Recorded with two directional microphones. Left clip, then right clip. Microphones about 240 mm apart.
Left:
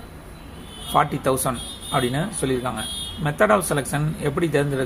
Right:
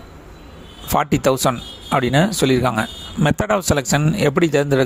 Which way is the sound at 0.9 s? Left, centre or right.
Right.